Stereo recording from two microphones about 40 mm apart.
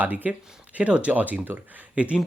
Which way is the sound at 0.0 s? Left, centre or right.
Right.